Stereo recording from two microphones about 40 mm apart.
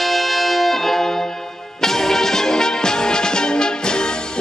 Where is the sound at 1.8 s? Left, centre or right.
Centre.